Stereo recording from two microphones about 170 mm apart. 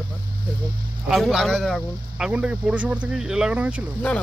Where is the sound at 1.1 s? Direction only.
Centre (ahead or behind).